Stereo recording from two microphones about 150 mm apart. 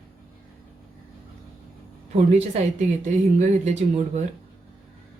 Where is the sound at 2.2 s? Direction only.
50° right (ahead or behind).